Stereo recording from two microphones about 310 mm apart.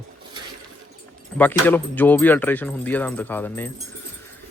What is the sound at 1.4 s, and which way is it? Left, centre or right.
Speech, centre.